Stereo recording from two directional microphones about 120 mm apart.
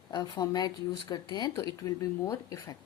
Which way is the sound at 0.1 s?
35° left (ahead or behind).